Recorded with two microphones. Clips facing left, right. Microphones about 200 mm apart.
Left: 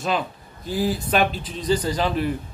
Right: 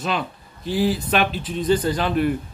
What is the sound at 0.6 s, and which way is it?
Speech, 45° left (ahead or behind).